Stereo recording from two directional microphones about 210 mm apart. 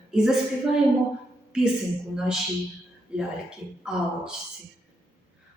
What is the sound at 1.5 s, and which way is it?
Speech, 5° right (ahead or behind).